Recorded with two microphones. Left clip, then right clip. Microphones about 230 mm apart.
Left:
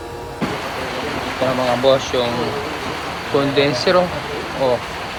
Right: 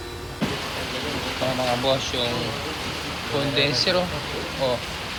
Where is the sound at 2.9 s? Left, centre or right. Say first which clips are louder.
Left 6 dB; left.